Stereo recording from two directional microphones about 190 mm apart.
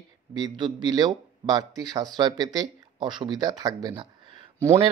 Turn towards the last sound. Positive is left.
turn(degrees=-20)  # may be behind; listen again after turning